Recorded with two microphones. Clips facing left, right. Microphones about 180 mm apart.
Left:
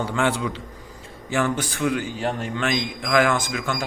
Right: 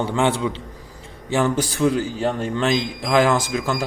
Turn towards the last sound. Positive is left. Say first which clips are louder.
# right 4 dB
turn(degrees=-35)  # may be behind; listen again after turning